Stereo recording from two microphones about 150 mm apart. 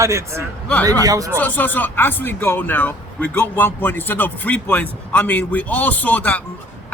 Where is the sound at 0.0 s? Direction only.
20° right (ahead or behind).